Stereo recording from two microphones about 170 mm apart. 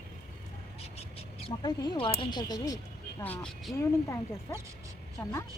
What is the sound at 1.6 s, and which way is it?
Speech, 25° left (ahead or behind).